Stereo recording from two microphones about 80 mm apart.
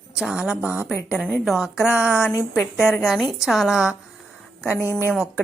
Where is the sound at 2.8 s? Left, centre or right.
Centre.